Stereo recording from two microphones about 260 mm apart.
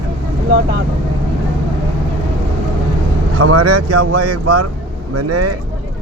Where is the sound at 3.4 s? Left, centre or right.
Right.